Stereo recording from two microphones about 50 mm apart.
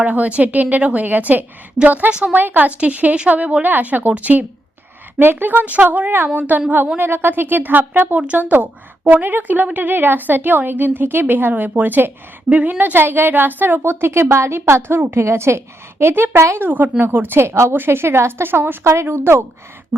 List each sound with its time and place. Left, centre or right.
0.0 s a woman's voice: right
7.0 s a woman's voice: right
12.5 s a woman's voice: right
14.0 s a woman's voice: right
14.7 s a woman's voice: right
16.6 s a woman's voice: right
17.4 s a woman's voice: right
17.7 s speech: right
18.8 s a woman's voice: right
19.0 s a woman's voice: right
19.9 s duck: centre